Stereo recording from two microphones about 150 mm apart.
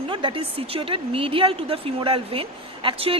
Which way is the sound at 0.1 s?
35° right (ahead or behind).